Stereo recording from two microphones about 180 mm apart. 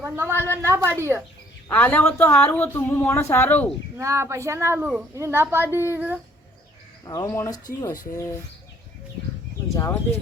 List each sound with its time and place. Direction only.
0.0 s a woman's voice: 10° right (ahead or behind)
0.3 s a woman's voice: 15° left (ahead or behind)
0.6 s a woman's voice: 15° right (ahead or behind)
1.6 s a woman's voice: 10° left (ahead or behind)
3.9 s a woman's voice: 15° right (ahead or behind)
7.0 s speech: 20° left (ahead or behind)
9.7 s speech: 20° left (ahead or behind)